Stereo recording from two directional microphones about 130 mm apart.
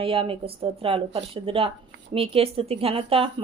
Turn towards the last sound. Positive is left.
turn(degrees=-45)  # may be behind; listen again after turning